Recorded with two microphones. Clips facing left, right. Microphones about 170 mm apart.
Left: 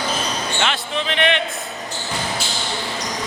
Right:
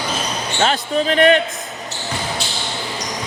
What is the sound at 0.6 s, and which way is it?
Speech, 40° right (ahead or behind).